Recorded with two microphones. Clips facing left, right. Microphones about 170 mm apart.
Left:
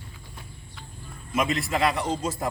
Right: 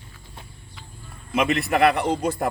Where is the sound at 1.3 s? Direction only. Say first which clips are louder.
Right 4 dB; 65° right (ahead or behind).